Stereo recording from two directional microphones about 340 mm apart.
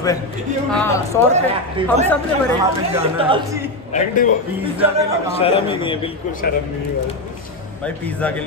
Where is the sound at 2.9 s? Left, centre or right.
Centre.